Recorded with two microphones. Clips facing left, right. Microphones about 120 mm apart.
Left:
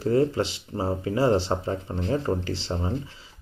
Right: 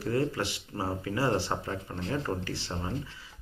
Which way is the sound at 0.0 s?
25° left (ahead or behind).